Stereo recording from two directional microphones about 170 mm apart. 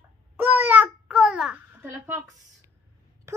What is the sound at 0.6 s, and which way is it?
Babbling, 10° right (ahead or behind).